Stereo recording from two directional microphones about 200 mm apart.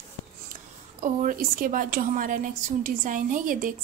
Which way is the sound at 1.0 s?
40° right (ahead or behind).